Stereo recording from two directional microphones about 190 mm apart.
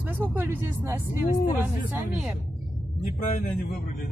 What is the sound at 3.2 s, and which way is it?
Speech, 45° left (ahead or behind).